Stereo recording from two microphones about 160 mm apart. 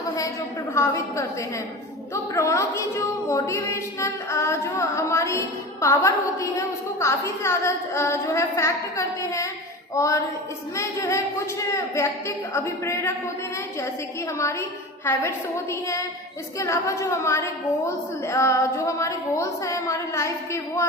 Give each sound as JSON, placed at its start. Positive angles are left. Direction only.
{"t": 0.7, "sound": "a woman's voice", "side_deg": 20}
{"t": 15.7, "sound": "a woman's voice", "side_deg": 20}